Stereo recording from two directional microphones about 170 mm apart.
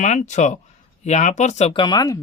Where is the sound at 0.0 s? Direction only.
45° left (ahead or behind).